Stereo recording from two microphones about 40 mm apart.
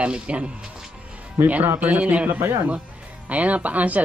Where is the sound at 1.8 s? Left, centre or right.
Right.